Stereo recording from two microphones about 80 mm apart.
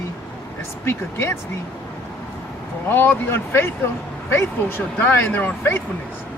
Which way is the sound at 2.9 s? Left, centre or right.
Left.